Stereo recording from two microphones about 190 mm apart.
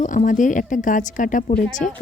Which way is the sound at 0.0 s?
40° left (ahead or behind).